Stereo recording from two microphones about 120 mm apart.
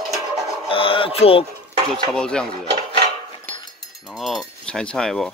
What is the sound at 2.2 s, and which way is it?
Speech, 5° left (ahead or behind).